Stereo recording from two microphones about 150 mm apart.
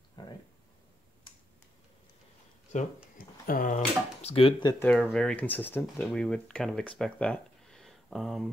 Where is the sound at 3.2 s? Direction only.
70° left (ahead or behind).